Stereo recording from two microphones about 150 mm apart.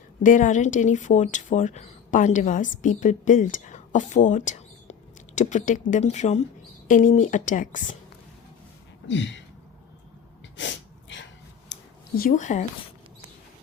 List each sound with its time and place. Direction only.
0.2 s speech: 60° left (ahead or behind)
6.8 s speech: 60° left (ahead or behind)
12.3 s speech: 55° left (ahead or behind)